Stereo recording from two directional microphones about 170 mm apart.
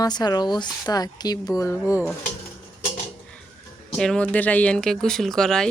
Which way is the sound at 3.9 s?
5° left (ahead or behind).